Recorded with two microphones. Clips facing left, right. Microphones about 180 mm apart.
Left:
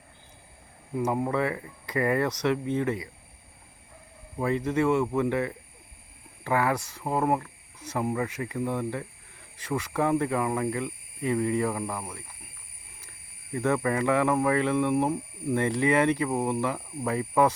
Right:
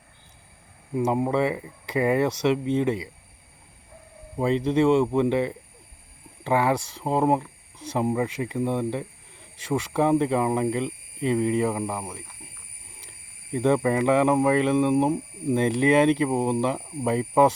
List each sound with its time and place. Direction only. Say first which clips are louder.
0.9 s speech: right 4 dB; 20° right (ahead or behind)
4.4 s speech: right 4 dB; 20° right (ahead or behind)
6.7 s speech: right 4 dB; 10° right (ahead or behind)
7.0 s speech: right 4 dB; 25° right (ahead or behind)
13.0 s speech: right 3 dB; 25° right (ahead or behind)